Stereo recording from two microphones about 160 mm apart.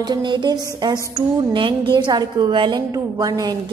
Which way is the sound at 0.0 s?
30° right (ahead or behind).